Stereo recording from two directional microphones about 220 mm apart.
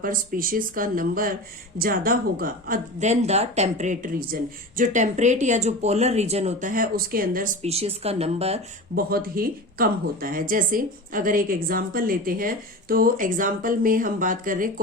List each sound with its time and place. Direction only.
0.0 s speech: 40° right (ahead or behind)
9.0 s speech: 45° right (ahead or behind)